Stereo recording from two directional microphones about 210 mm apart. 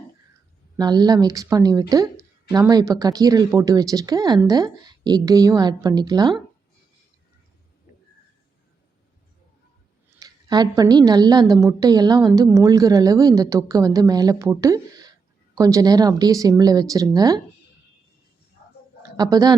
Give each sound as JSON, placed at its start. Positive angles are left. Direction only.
{"t": 0.8, "sound": "a woman's voice", "side_deg": -20}
{"t": 10.2, "sound": "a woman's voice", "side_deg": -20}
{"t": 19.1, "sound": "speech", "side_deg": -20}